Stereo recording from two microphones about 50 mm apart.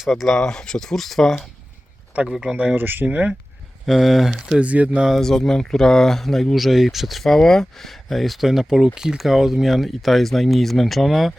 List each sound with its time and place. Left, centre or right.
0.0 s speech: centre
0.3 s speech: centre
2.2 s speech: centre
2.7 s speech: right
3.8 s speech: centre
4.5 s speech: right
5.2 s speech: centre
7.3 s speech: centre